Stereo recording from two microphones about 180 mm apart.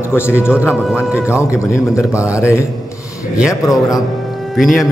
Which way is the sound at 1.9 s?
15° left (ahead or behind).